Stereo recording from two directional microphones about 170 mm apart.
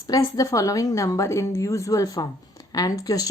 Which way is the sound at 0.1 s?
20° left (ahead or behind).